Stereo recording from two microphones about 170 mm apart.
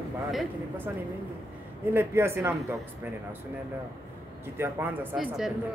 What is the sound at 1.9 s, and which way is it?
Speech, 15° right (ahead or behind).